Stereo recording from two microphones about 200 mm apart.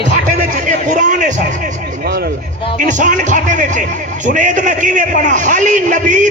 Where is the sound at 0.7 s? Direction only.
40° right (ahead or behind).